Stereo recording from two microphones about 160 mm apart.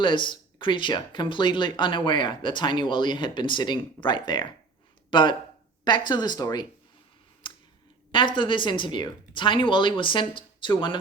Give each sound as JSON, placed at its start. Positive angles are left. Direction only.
{"t": 0.0, "sound": "speech", "side_deg": 30}
{"t": 7.4, "sound": "a sound", "side_deg": 30}
{"t": 8.1, "sound": "speech", "side_deg": 30}